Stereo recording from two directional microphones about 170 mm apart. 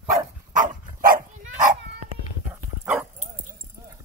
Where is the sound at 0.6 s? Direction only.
50° right (ahead or behind).